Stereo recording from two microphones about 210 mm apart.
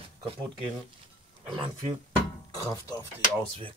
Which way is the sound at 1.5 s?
25° right (ahead or behind).